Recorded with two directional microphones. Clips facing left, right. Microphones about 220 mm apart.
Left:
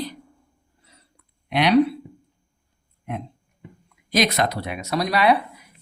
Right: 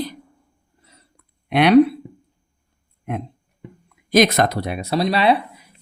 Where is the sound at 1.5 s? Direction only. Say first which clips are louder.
Right 5 dB; 55° right (ahead or behind).